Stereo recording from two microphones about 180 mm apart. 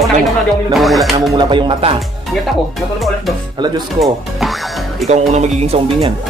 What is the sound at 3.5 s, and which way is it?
Speech, 25° right (ahead or behind).